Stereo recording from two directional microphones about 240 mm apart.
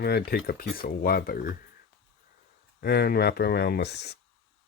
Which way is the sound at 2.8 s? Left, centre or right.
Left.